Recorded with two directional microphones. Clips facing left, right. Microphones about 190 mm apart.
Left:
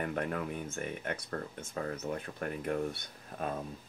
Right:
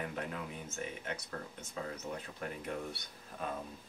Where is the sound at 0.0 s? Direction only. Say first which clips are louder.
Left 6 dB; 55° left (ahead or behind).